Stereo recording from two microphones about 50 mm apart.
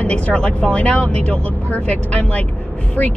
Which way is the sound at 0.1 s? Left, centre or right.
Left.